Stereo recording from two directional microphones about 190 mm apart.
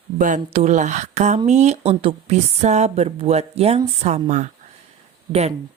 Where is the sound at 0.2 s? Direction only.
40° right (ahead or behind).